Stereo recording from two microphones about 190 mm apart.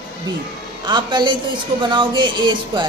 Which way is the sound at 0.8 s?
25° right (ahead or behind).